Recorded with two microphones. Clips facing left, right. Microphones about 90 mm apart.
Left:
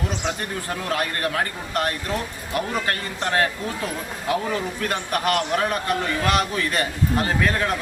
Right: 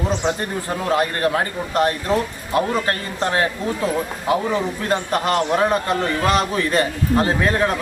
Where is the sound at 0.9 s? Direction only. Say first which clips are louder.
Right 6 dB; 25° right (ahead or behind).